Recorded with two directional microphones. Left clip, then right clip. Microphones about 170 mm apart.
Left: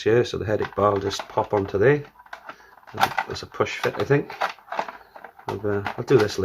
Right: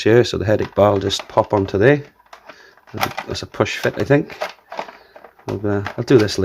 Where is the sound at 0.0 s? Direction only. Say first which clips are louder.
Right 6 dB; 55° right (ahead or behind).